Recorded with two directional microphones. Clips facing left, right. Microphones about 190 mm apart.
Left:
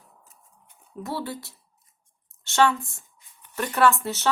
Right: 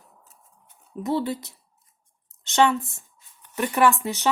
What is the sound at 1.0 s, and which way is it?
A woman's voice, 20° right (ahead or behind).